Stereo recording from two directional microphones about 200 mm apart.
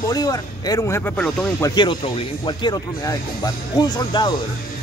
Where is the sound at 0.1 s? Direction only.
20° left (ahead or behind).